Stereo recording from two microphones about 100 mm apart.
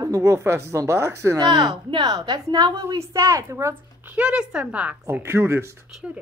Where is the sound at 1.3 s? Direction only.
40° right (ahead or behind).